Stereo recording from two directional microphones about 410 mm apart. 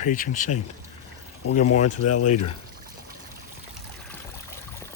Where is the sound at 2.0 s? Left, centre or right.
Left.